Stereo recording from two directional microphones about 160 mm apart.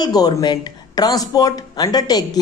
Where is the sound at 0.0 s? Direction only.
25° left (ahead or behind).